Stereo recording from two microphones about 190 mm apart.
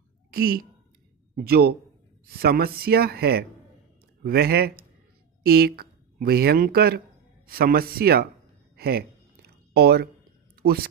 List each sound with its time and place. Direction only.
0.3 s a woman's voice: 50° right (ahead or behind)
8.7 s a sound: 55° right (ahead or behind)
10.6 s a woman's voice: 55° right (ahead or behind)